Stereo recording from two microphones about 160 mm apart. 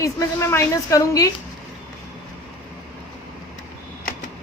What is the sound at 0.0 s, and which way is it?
A woman's voice, 20° left (ahead or behind).